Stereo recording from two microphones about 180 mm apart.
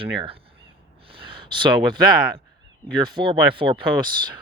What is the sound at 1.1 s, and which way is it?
Speech, 30° right (ahead or behind).